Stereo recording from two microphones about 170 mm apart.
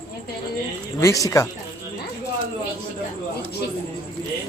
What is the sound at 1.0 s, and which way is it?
Speech, 20° left (ahead or behind).